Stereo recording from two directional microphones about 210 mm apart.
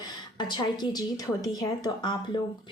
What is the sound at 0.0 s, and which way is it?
A woman's voice, 20° left (ahead or behind).